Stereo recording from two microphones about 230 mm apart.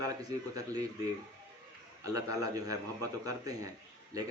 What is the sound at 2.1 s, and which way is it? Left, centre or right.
A man's voice, centre.